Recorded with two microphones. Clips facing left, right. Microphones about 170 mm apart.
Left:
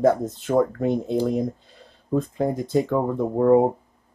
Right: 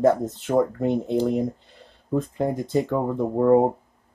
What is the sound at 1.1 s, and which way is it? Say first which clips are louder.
Speech: even; 10° left (ahead or behind).